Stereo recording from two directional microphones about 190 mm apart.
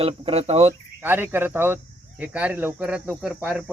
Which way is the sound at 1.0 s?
10° right (ahead or behind).